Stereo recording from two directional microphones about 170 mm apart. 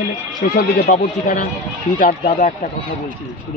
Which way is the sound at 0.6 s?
70° left (ahead or behind).